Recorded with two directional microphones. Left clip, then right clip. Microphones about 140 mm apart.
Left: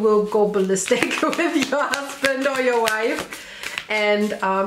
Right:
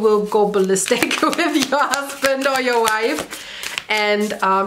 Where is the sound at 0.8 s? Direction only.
25° right (ahead or behind).